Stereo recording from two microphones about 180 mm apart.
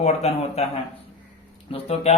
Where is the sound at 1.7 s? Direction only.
35° left (ahead or behind).